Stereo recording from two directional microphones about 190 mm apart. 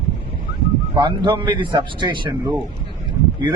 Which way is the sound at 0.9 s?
25° right (ahead or behind).